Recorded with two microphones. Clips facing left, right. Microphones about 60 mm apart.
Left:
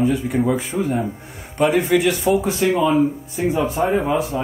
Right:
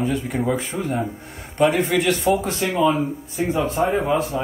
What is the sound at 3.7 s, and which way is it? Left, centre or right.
Speech, left.